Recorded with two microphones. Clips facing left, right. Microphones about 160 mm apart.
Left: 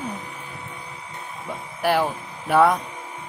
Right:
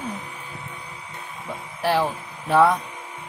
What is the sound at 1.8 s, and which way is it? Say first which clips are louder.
Speech: left 1 dB; 10° left (ahead or behind).